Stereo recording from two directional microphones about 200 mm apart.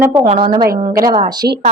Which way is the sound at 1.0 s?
20° right (ahead or behind).